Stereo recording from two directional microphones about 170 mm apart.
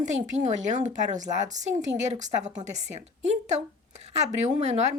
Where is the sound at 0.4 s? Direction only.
45° right (ahead or behind).